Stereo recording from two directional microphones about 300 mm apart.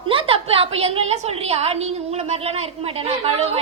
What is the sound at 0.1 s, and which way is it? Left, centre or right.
A woman's voice, centre.